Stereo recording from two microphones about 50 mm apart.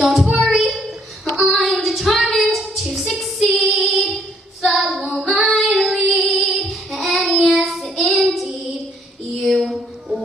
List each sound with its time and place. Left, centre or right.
0.0 s child singing: centre
3.0 s female singing: centre
4.6 s child singing: centre
5.2 s female singing: centre
5.5 s child singing: centre
5.9 s music: centre
6.4 s child singing: centre
9.4 s a sound: centre